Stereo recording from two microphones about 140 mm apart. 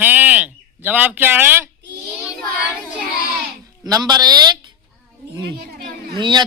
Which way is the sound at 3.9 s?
25° right (ahead or behind).